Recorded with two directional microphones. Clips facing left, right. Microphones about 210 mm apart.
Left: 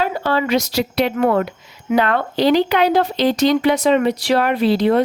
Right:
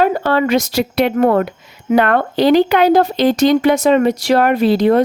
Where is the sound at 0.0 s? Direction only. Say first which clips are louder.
Right 5 dB; 50° right (ahead or behind).